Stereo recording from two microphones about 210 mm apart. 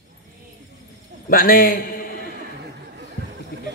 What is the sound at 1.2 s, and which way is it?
Speech, 40° left (ahead or behind).